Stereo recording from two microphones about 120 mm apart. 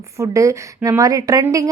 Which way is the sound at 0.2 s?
25° right (ahead or behind).